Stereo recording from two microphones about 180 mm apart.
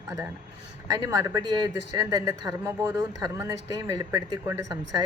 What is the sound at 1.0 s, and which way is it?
Speech, 20° right (ahead or behind).